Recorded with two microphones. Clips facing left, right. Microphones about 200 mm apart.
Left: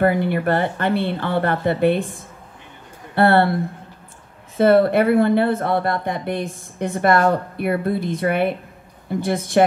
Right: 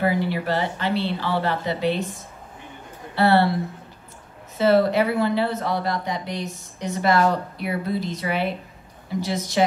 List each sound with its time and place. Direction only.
0.0 s speech: 55° left (ahead or behind)
4.6 s speech: 55° left (ahead or behind)